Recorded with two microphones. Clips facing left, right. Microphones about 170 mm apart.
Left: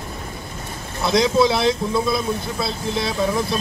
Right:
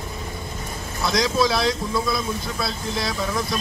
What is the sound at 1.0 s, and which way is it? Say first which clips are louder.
A man's voice: left 4 dB; 25° left (ahead or behind).